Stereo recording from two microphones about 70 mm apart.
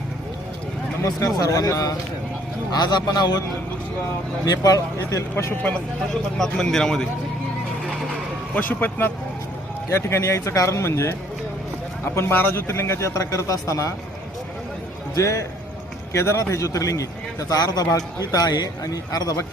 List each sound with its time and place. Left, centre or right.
1.0 s a man's voice: left
2.7 s a man's voice: left
4.4 s a man's voice: left
5.1 s speech: left
6.3 s a man's voice: centre
8.5 s speech: left
9.9 s speech: left
15.1 s a man's voice: left